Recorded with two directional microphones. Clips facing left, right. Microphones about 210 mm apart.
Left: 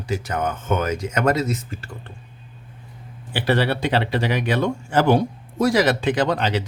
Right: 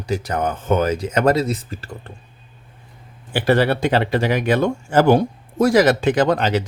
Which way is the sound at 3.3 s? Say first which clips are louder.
Right 4 dB; 50° right (ahead or behind).